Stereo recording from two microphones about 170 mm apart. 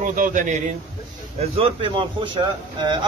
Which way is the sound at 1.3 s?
35° right (ahead or behind).